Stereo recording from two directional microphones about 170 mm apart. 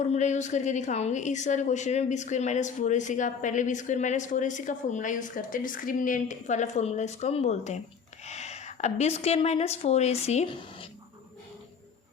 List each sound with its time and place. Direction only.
0.1 s a woman's voice: 45° left (ahead or behind)